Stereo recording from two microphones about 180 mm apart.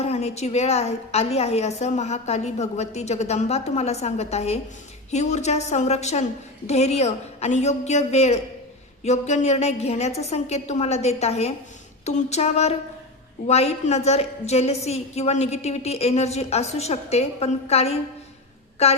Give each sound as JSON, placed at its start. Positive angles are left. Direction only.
{"t": 0.0, "sound": "a woman's voice", "side_deg": 35}